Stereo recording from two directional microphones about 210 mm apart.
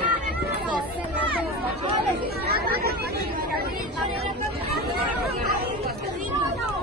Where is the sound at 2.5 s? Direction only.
45° right (ahead or behind).